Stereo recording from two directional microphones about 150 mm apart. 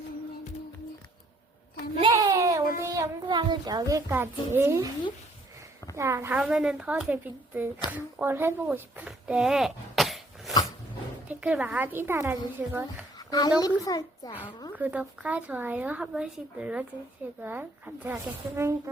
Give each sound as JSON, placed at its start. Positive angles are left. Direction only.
{"t": 2.0, "sound": "a sound", "side_deg": -35}
{"t": 2.3, "sound": "a sound", "side_deg": -20}
{"t": 2.9, "sound": "a child's voice", "side_deg": -25}
{"t": 6.0, "sound": "a woman's voice", "side_deg": -20}
{"t": 6.3, "sound": "a child's voice", "side_deg": -5}
{"t": 13.1, "sound": "a woman's voice", "side_deg": 25}
{"t": 14.8, "sound": "speech", "side_deg": -10}